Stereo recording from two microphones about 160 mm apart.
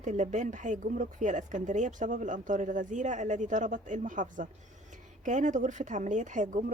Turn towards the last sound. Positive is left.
turn(degrees=-50)  # may be behind; listen again after turning